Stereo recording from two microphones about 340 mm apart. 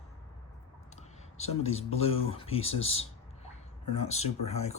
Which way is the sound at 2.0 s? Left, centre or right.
Centre.